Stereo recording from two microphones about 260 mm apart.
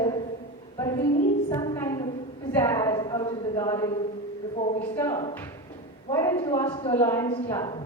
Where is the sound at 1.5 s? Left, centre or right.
Centre.